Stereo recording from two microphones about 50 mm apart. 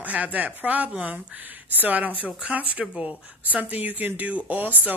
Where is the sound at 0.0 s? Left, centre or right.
Right.